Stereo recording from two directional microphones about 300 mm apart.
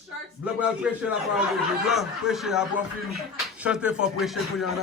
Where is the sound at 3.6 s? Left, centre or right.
Centre.